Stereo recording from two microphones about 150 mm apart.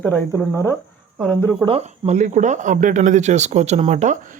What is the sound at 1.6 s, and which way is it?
Speech, 40° right (ahead or behind).